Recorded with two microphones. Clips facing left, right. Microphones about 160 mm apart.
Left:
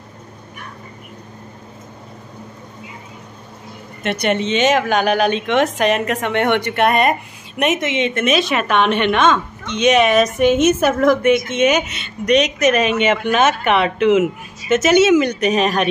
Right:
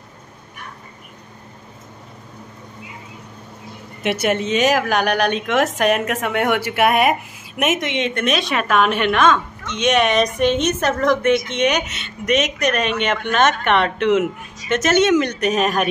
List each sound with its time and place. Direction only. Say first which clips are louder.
4.0 s a woman's voice: left 1 dB; 5° right (ahead or behind)